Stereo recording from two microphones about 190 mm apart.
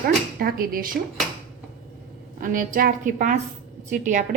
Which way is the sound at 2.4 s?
45° right (ahead or behind).